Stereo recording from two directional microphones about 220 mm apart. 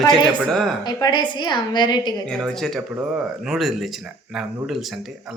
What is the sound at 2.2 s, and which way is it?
Speech, centre (ahead or behind).